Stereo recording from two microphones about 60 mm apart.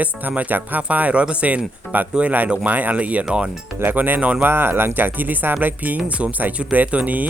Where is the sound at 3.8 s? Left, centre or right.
Right.